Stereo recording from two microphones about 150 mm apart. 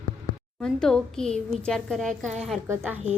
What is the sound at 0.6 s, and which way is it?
A woman's voice, 5° left (ahead or behind).